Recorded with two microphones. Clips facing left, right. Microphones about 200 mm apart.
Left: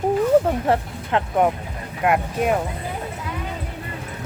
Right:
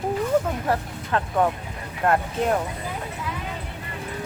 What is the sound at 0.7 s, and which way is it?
Speech, 20° left (ahead or behind).